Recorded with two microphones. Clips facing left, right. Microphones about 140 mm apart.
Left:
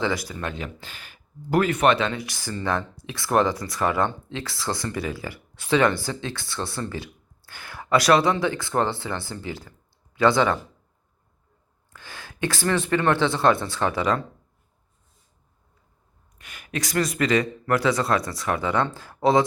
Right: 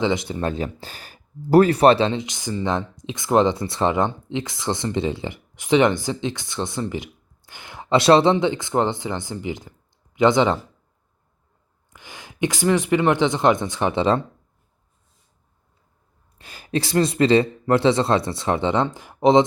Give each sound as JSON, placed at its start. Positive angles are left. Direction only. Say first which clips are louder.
{"t": 0.0, "sound": "speech", "louder": "right 5 dB", "side_deg": -20}
{"t": 11.9, "sound": "speech", "louder": "right 5 dB", "side_deg": -15}
{"t": 16.4, "sound": "speech", "louder": "right 7 dB", "side_deg": -30}